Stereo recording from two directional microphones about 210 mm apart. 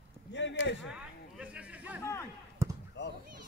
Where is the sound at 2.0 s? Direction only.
15° left (ahead or behind).